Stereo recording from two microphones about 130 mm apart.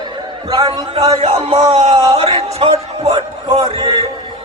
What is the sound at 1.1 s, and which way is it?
Speech, 50° right (ahead or behind).